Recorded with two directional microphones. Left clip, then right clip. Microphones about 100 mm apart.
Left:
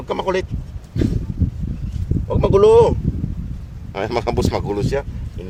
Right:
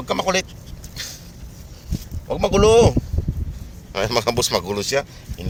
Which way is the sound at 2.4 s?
40° left (ahead or behind).